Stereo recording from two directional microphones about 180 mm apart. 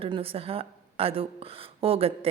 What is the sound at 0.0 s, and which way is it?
A woman's voice, 30° right (ahead or behind).